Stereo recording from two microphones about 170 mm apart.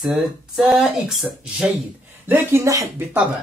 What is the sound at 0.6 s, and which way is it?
Speech, 5° right (ahead or behind).